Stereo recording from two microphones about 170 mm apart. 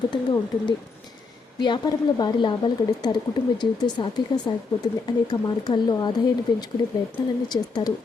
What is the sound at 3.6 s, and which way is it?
Speech, 25° left (ahead or behind).